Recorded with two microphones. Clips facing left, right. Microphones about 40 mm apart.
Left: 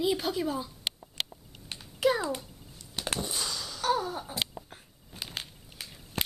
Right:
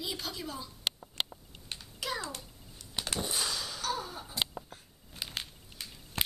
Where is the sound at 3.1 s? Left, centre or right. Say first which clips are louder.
Right 2 dB; centre.